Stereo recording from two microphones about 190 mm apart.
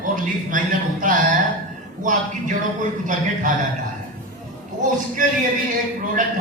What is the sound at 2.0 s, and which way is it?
Speech, 40° right (ahead or behind).